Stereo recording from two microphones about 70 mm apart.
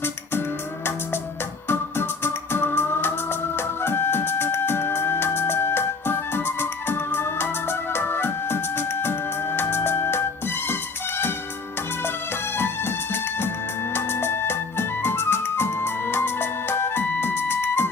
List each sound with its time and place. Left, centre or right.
1.6 s music: left
12.0 s music: left